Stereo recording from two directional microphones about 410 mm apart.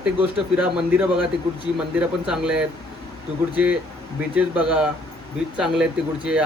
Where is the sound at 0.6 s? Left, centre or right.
Centre.